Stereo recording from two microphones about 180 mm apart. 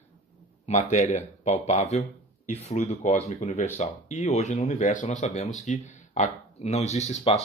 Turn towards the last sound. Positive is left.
turn(degrees=35)  # may be behind; listen again after turning